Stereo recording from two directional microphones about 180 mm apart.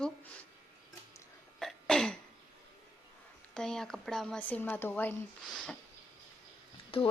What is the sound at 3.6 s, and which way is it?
A woman's voice, 5° left (ahead or behind).